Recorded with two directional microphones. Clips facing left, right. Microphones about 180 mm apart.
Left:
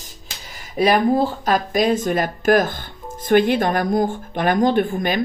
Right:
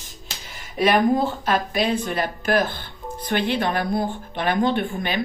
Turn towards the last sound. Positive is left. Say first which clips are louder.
# left 5 dB
turn(degrees=45)  # may be behind; listen again after turning